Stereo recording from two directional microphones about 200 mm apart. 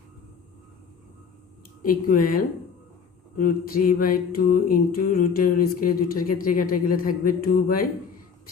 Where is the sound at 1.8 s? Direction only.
45° left (ahead or behind).